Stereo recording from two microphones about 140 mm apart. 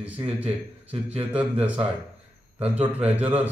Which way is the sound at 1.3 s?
10° right (ahead or behind).